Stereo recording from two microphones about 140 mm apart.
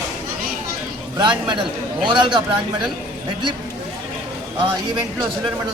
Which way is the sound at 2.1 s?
35° right (ahead or behind).